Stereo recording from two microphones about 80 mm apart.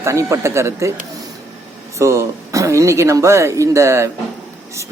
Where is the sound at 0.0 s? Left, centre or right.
Right.